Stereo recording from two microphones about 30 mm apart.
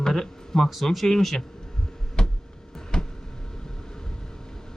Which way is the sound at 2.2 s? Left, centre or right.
Left.